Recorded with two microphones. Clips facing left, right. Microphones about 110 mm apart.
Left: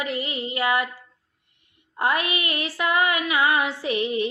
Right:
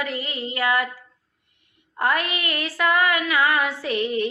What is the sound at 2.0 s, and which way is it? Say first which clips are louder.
Female singing: even; 20° left (ahead or behind).